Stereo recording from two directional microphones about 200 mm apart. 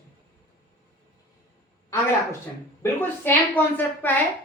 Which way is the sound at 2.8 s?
10° left (ahead or behind).